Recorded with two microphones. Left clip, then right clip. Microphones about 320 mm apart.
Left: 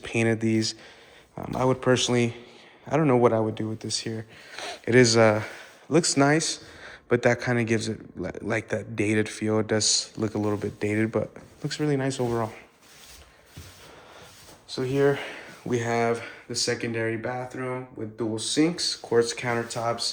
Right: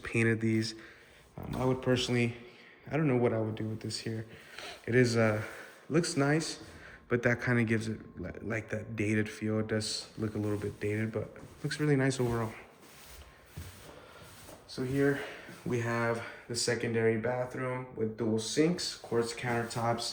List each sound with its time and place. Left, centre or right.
0.0 s a man's voice: centre
3.2 s speech: left
3.5 s a man's voice: centre
15.7 s a man's voice: centre